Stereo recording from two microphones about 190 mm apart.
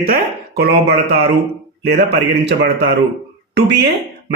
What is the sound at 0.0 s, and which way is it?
Speech, 55° right (ahead or behind).